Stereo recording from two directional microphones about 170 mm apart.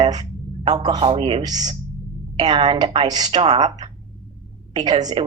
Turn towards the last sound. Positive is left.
turn(degrees=-25)  # may be behind; listen again after turning